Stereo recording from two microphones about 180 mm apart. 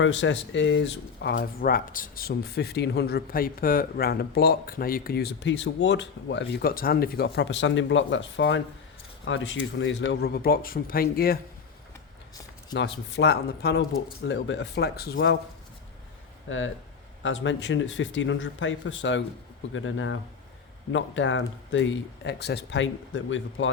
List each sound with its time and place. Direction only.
0.0 s speech: 90° left
1.5 s speech: 55° left (ahead or behind)
12.7 s speech: 75° left (ahead or behind)
14.3 s speech: 90° left; by 15.4 s 70° left (ahead or behind)
16.5 s speech: 90° left